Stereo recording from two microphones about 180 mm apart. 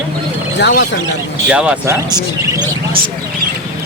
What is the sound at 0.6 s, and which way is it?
Speech, 65° left (ahead or behind).